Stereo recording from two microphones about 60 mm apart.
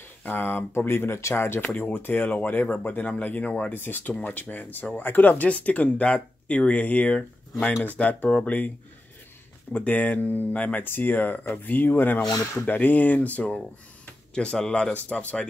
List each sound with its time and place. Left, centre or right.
0.2 s speech: left
3.7 s speech: left
14.3 s speech: centre